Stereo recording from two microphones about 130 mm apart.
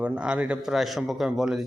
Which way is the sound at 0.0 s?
10° right (ahead or behind).